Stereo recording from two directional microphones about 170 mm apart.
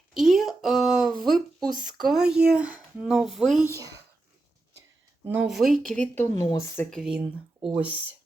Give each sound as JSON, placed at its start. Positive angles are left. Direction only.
{"t": 0.1, "sound": "a sound", "side_deg": 0}
{"t": 1.7, "sound": "speech", "side_deg": -50}
{"t": 2.0, "sound": "speech", "side_deg": -5}
{"t": 3.8, "sound": "speech", "side_deg": -20}
{"t": 5.3, "sound": "speech", "side_deg": -5}
{"t": 5.9, "sound": "speech", "side_deg": 10}
{"t": 6.9, "sound": "speech", "side_deg": -5}